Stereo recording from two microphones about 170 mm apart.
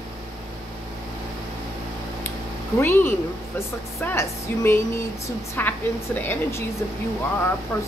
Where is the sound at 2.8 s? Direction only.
15° left (ahead or behind).